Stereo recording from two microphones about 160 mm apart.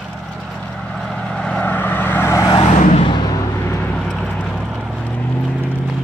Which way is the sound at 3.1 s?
25° left (ahead or behind).